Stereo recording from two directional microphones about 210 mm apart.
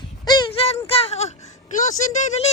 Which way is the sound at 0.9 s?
30° left (ahead or behind).